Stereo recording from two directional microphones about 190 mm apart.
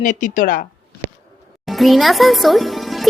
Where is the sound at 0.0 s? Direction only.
45° left (ahead or behind).